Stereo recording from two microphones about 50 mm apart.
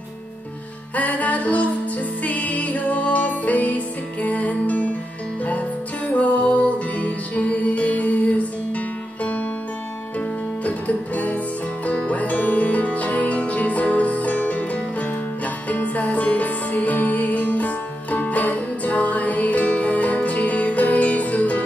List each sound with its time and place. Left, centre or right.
0.9 s music: left
6.1 s music: left
10.6 s music: left